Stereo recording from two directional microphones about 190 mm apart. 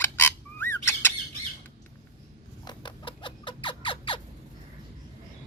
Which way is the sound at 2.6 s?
25° left (ahead or behind).